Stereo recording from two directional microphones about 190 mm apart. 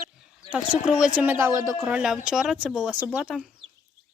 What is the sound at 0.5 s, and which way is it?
Speech, 5° right (ahead or behind).